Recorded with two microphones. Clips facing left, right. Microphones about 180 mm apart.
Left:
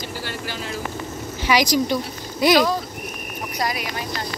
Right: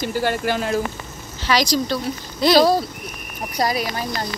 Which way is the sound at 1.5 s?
15° left (ahead or behind).